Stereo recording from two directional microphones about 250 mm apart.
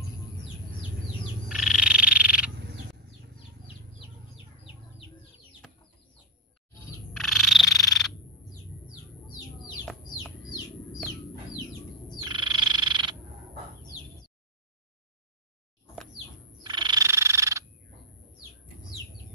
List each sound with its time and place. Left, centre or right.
1.6 s frog: centre
7.2 s frog: centre
12.3 s frog: centre
16.6 s frog: centre